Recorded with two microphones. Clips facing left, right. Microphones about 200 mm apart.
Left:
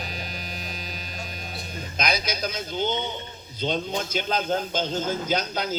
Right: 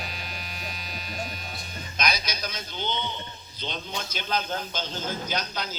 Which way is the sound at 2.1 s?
50° left (ahead or behind).